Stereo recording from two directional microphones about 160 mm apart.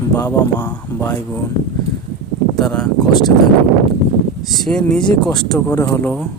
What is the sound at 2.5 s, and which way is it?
Speech, 5° left (ahead or behind).